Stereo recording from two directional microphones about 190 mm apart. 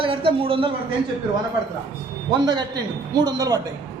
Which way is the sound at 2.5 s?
20° right (ahead or behind).